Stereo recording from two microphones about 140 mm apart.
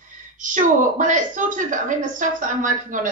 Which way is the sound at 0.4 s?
65° right (ahead or behind).